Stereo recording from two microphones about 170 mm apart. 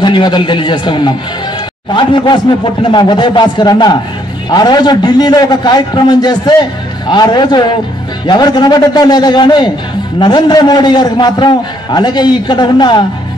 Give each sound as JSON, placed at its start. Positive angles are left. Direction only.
{"t": 0.0, "sound": "a man's voice", "side_deg": 25}